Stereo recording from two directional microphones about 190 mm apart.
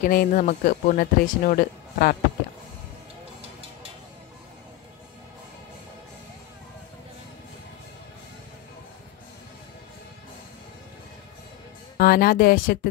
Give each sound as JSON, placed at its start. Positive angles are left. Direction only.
{"t": 0.0, "sound": "speech", "side_deg": 45}
{"t": 12.0, "sound": "speech", "side_deg": 50}